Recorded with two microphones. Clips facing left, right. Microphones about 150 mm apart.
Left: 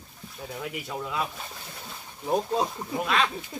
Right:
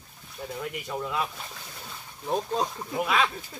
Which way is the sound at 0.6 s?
Centre (ahead or behind).